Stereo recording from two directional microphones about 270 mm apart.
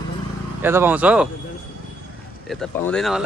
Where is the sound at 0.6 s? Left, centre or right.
Centre.